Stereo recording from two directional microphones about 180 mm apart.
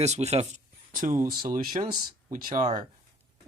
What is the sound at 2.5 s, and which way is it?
Speech, 25° right (ahead or behind).